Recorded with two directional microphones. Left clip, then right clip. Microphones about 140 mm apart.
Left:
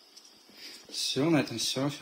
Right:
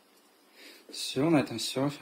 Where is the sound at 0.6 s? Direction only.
5° right (ahead or behind).